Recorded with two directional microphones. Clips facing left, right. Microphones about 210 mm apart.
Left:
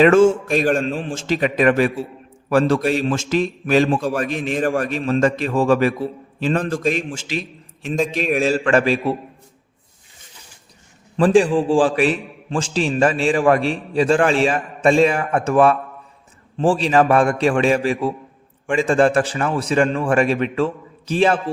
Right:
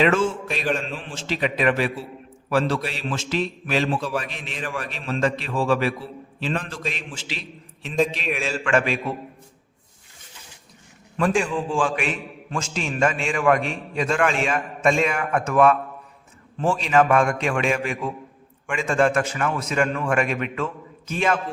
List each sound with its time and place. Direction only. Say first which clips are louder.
0.0 s a man's voice: left 8 dB; 45° left (ahead or behind)
11.2 s a man's voice: left 8 dB; 35° left (ahead or behind)